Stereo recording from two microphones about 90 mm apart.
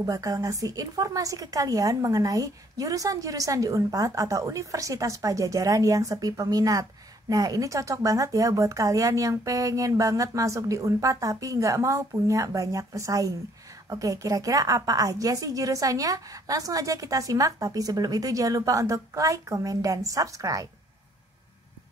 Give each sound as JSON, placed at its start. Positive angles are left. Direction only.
{"t": 0.0, "sound": "a woman's voice", "side_deg": -40}